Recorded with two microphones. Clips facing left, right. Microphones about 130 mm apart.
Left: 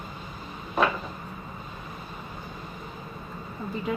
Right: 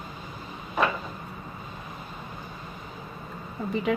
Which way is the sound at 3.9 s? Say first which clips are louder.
Right 4 dB; 90° right.